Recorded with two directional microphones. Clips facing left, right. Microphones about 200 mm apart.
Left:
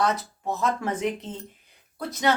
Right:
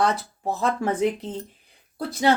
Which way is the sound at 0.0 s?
30° right (ahead or behind).